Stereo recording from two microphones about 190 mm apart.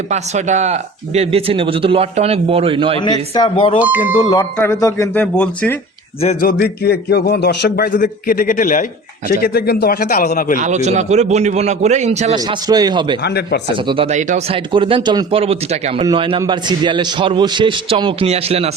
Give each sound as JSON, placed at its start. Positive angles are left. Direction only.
{"t": 0.1, "sound": "speech", "side_deg": -40}
{"t": 3.0, "sound": "speech", "side_deg": 20}
{"t": 3.8, "sound": "speech", "side_deg": -10}
{"t": 4.2, "sound": "a man's voice", "side_deg": 20}
{"t": 5.2, "sound": "speech", "side_deg": 5}
{"t": 6.4, "sound": "a man's voice", "side_deg": 55}
{"t": 10.6, "sound": "speech", "side_deg": -40}
{"t": 12.3, "sound": "speech", "side_deg": -20}
{"t": 13.2, "sound": "speech", "side_deg": 60}
{"t": 13.7, "sound": "speech", "side_deg": -25}